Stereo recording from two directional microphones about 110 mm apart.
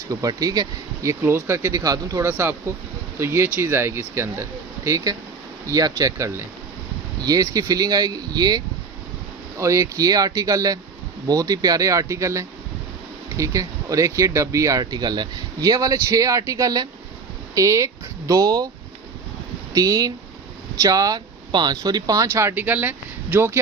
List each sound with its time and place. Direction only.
0.1 s speech: 30° right (ahead or behind)
1.2 s speech: 20° right (ahead or behind)
2.2 s speech: 20° right (ahead or behind)
19.7 s speech: 35° right (ahead or behind)